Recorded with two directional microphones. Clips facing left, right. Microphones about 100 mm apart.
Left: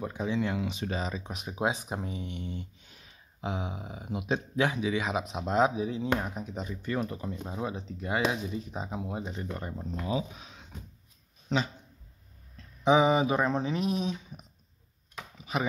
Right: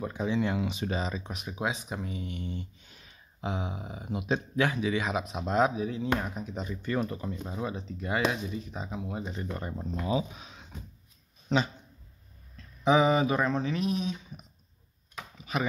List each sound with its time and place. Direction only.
0.2 s speech: 5° right (ahead or behind)
1.3 s speech: 30° left (ahead or behind)
1.7 s speech: 40° left (ahead or behind); by 5.2 s 10° left (ahead or behind)
5.2 s speech: 20° left (ahead or behind)
8.7 s speech: 25° left (ahead or behind)
9.4 s speech: centre (ahead or behind)
9.8 s speech: 15° right (ahead or behind)
12.8 s speech: 15° left (ahead or behind)